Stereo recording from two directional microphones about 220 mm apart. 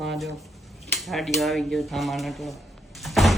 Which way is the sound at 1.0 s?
Centre (ahead or behind).